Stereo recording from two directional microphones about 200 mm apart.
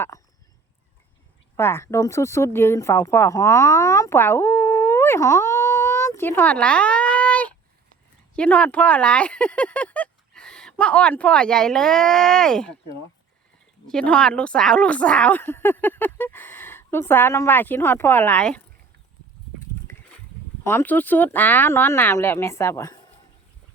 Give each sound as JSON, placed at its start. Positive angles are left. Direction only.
{"t": 0.1, "sound": "a sound", "side_deg": 15}
{"t": 1.5, "sound": "speech", "side_deg": 10}
{"t": 13.8, "sound": "a woman's voice", "side_deg": 5}
{"t": 20.7, "sound": "a woman's voice", "side_deg": 10}